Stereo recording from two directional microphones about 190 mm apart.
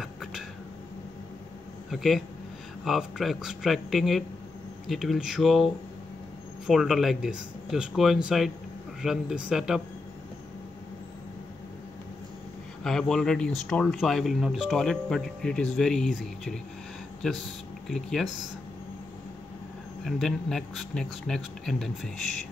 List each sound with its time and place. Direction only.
0.0 s a sound: centre (ahead or behind)
1.9 s speech: centre (ahead or behind)
12.8 s speech: centre (ahead or behind)
17.8 s speech: centre (ahead or behind)
20.1 s speech: centre (ahead or behind)